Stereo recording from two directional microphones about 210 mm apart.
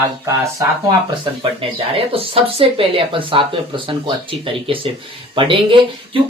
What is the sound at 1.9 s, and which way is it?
Speech, 25° right (ahead or behind).